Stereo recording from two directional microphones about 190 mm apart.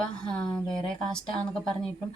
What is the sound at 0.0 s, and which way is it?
Speech, 5° left (ahead or behind).